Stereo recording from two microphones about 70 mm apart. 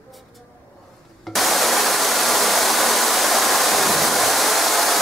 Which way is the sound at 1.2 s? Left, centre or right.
Centre.